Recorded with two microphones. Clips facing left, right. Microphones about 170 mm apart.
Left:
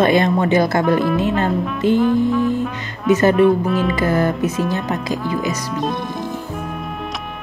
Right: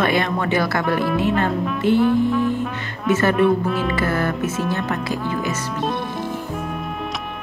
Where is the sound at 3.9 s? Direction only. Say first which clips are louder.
Left 4 dB; 15° left (ahead or behind).